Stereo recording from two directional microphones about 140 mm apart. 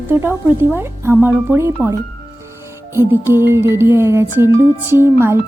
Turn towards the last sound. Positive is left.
turn(degrees=-15)  # may be behind; listen again after turning